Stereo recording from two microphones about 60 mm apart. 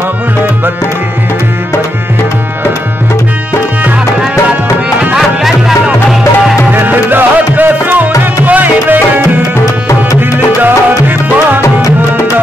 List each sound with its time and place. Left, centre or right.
5.1 s music: centre
6.7 s music: right
8.2 s tabla: right
10.3 s music: right